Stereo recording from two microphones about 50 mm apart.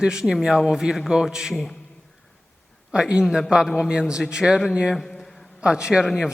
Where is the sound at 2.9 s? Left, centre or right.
Centre.